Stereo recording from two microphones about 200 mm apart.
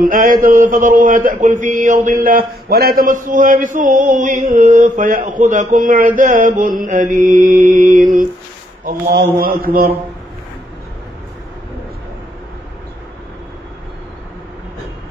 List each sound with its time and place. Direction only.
0.0 s a man's voice: 40° right (ahead or behind)